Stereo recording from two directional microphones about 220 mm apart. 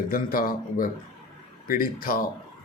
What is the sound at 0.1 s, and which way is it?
Speech, 40° left (ahead or behind).